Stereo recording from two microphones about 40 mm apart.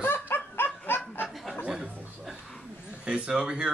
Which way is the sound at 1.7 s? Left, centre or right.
Centre.